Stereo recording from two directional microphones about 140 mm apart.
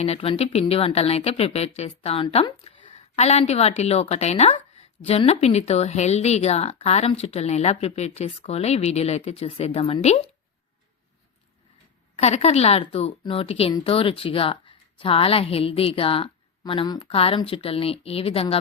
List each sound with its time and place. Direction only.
0.0 s a woman's voice: 45° left (ahead or behind)
12.1 s speech: 50° left (ahead or behind)